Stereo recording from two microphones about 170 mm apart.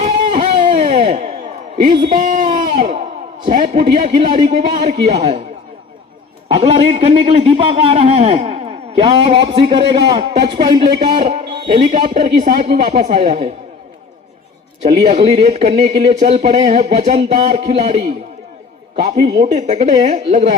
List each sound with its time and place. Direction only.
0.0 s a sound: 45° right (ahead or behind)
2.0 s a man's voice: 45° right (ahead or behind)
6.5 s a man's voice: 40° right (ahead or behind)
10.8 s a man's voice: 25° right (ahead or behind)
11.2 s a man's voice: 40° right (ahead or behind)
15.0 s a man's voice: 40° right (ahead or behind)
19.5 s a man's voice: 40° right (ahead or behind)